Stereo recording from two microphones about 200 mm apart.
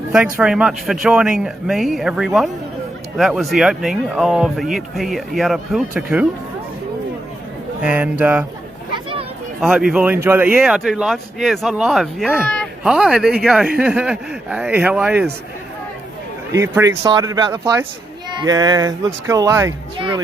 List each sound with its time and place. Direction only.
0.3 s speech: 5° right (ahead or behind)
7.8 s speech: 5° right (ahead or behind)
9.6 s speech: 5° right (ahead or behind)
16.6 s speech: 15° right (ahead or behind)